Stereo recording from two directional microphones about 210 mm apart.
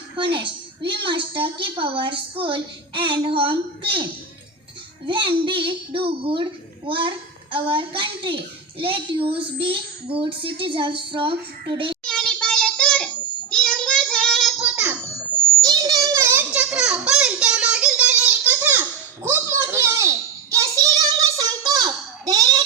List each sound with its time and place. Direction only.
0.9 s a woman's voice: 25° right (ahead or behind)
12.0 s child singing: 5° left (ahead or behind)
15.6 s a sound: 15° right (ahead or behind)